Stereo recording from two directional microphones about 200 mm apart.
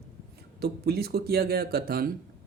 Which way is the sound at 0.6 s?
50° right (ahead or behind).